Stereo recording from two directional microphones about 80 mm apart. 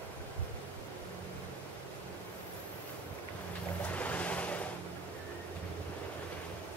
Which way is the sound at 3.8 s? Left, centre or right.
Centre.